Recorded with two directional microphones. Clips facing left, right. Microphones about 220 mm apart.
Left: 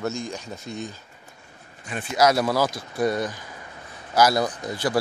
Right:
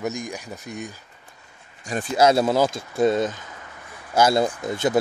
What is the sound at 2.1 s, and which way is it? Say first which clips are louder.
Speech: right 2 dB; 25° right (ahead or behind).